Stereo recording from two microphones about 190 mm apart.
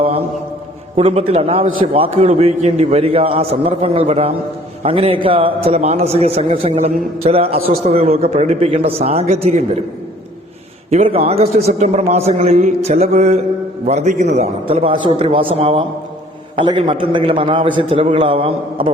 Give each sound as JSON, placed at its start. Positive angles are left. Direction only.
{"t": 0.9, "sound": "a man's voice", "side_deg": -30}
{"t": 10.9, "sound": "a man's voice", "side_deg": -35}